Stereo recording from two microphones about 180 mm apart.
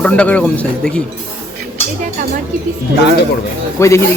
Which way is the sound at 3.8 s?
15° left (ahead or behind).